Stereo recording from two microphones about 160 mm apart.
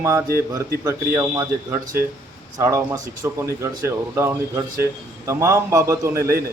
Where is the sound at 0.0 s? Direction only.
15° right (ahead or behind).